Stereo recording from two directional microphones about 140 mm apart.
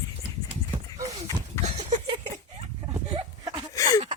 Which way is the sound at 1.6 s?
20° left (ahead or behind).